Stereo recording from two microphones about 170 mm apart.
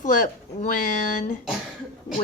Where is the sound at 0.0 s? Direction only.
50° left (ahead or behind).